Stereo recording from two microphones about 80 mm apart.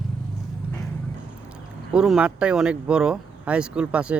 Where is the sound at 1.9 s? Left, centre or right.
Centre.